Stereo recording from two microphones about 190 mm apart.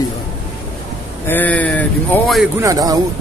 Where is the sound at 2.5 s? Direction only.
15° right (ahead or behind).